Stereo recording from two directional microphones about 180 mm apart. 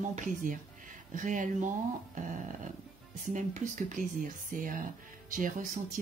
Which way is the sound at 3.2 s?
45° right (ahead or behind).